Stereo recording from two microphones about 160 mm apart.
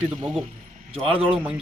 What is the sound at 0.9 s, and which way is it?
Speech, 35° right (ahead or behind).